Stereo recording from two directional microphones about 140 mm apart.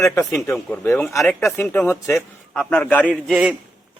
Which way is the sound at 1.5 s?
15° left (ahead or behind).